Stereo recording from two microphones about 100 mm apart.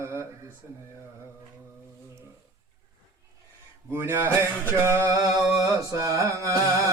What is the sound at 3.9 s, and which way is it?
Mantra, 25° right (ahead or behind).